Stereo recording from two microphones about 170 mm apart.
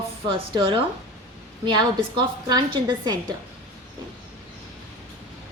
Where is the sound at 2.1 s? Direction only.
25° right (ahead or behind).